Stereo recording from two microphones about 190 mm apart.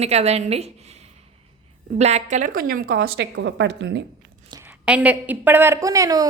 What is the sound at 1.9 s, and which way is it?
A woman's voice, 35° right (ahead or behind).